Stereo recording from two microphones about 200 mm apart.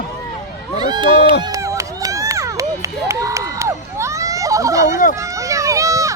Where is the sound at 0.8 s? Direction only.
20° right (ahead or behind).